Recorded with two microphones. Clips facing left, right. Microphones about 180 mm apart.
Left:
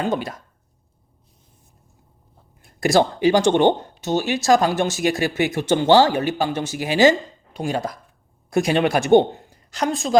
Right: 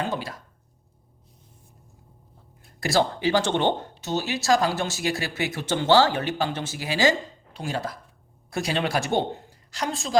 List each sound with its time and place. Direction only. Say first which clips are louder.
0.1 s speech: left 6 dB; 20° left (ahead or behind)
2.8 s speech: left 6 dB; 15° left (ahead or behind)
4.0 s speech: left 6 dB; 45° left (ahead or behind)
4.6 s speech: left 6 dB; 20° left (ahead or behind)
5.2 s speech: left 8 dB; 50° left (ahead or behind)
5.5 s speech: left 4 dB; 15° left (ahead or behind)
8.7 s speech: left 9 dB; 55° left (ahead or behind)
9.5 s a sound: left 6 dB; 20° left (ahead or behind)